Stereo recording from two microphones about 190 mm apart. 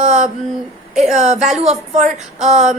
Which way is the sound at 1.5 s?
35° right (ahead or behind).